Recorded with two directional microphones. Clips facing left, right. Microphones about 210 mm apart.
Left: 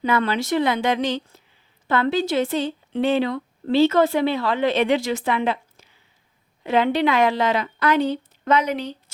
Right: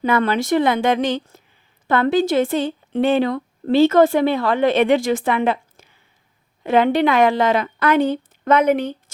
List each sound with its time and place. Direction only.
0.0 s a woman's voice: 50° right (ahead or behind)